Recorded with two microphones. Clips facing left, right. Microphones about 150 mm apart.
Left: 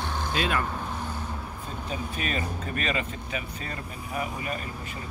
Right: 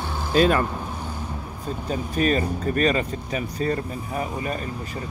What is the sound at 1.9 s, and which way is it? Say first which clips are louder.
Speech: right 10 dB; 40° right (ahead or behind).